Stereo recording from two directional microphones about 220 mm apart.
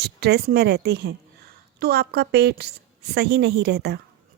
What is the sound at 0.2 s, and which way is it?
A woman's voice, 45° right (ahead or behind).